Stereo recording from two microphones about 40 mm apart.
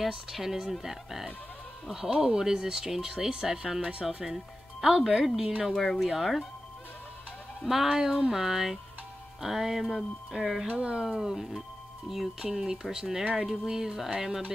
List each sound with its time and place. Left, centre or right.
0.0 s speech: centre
5.7 s speech: centre
7.6 s speech: centre
10.7 s speech: right
11.2 s speech: centre
13.2 s speech: right
13.5 s speech: centre